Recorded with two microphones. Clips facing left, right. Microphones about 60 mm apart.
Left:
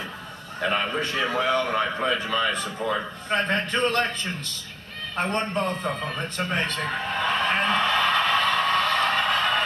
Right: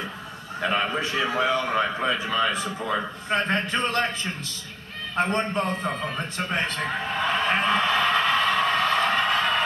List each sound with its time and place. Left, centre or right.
0.7 s a man's voice: centre
3.8 s a man's voice: centre
5.2 s a man's voice: centre
6.8 s a sound: centre